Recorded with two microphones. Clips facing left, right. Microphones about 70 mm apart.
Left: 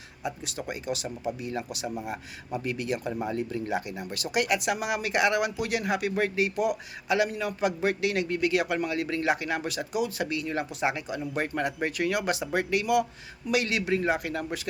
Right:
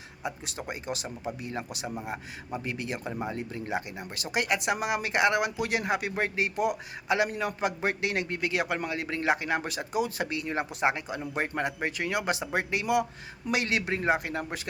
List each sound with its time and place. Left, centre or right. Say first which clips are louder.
0.2 s a man's voice: left 2 dB; right
3.1 s a man's voice: left 4 dB; centre